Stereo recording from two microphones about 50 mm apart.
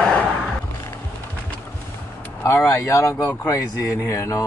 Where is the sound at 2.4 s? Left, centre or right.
Left.